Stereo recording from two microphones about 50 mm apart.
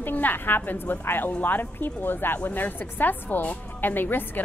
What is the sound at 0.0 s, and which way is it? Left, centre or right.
A woman's voice, left.